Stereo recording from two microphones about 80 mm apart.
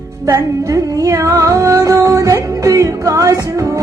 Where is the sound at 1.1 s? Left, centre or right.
Right.